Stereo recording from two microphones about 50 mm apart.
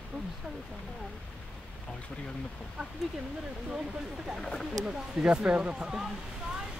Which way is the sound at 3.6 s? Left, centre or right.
Centre.